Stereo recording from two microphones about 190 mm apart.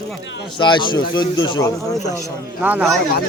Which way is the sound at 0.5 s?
25° left (ahead or behind).